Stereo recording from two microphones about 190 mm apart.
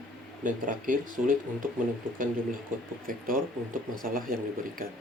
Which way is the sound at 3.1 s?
45° right (ahead or behind).